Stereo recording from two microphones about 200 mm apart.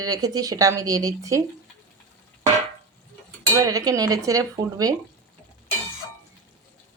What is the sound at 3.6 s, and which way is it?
Speech, 20° right (ahead or behind).